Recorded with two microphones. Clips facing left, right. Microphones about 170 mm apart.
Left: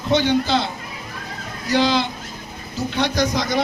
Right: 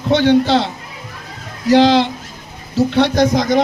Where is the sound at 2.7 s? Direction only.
65° right (ahead or behind).